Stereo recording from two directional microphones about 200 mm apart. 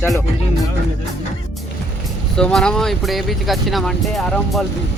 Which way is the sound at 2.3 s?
5° left (ahead or behind).